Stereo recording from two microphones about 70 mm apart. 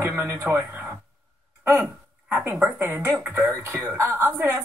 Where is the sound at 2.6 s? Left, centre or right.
Right.